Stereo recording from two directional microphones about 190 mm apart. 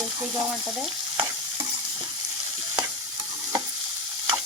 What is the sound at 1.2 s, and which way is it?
Stir, 25° right (ahead or behind).